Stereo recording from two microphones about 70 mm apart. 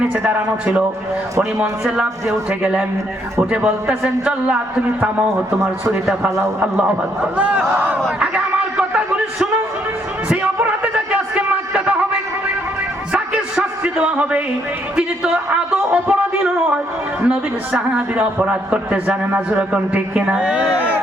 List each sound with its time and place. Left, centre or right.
0.2 s a man's voice: centre
5.5 s a man's voice: right
6.1 s a man's voice: centre
6.6 s a man's voice: centre
8.2 s a sound: centre
13.1 s music: centre
15.4 s a man's voice: centre